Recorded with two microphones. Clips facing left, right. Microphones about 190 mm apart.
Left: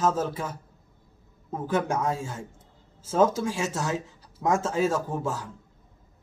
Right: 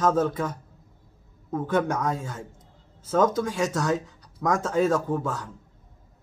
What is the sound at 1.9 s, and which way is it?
Speech, 30° left (ahead or behind).